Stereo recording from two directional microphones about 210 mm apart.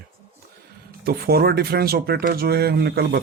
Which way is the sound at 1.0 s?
45° right (ahead or behind).